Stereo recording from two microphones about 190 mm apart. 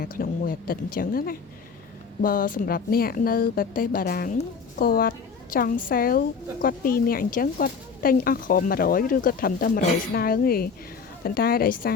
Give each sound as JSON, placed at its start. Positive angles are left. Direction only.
{"t": 0.0, "sound": "a woman's voice", "side_deg": 45}